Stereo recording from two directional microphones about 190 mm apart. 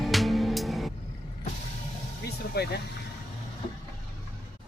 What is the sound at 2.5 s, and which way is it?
Vehicle, 55° left (ahead or behind).